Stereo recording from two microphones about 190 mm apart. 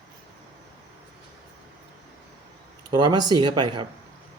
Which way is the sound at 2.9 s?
20° right (ahead or behind).